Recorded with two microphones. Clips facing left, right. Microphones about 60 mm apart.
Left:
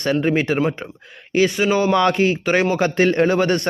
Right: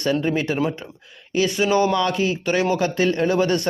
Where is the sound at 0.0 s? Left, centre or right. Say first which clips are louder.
Left 3 dB; left.